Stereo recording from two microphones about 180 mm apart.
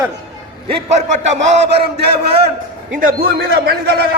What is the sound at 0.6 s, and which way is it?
Speech, 35° right (ahead or behind).